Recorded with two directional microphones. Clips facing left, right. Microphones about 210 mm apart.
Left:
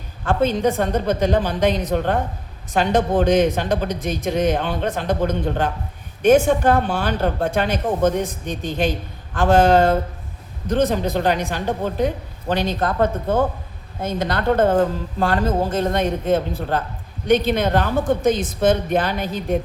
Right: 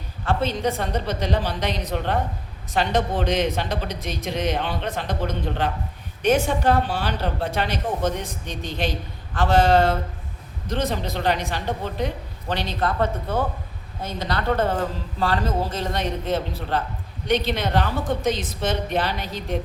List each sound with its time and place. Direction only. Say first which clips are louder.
0.3 s a woman's voice: left 5 dB; 50° left (ahead or behind)